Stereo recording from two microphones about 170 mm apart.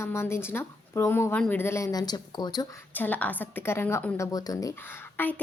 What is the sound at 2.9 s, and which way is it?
A woman's voice, 10° left (ahead or behind).